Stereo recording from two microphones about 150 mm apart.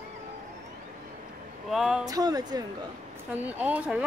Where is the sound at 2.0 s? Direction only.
25° right (ahead or behind).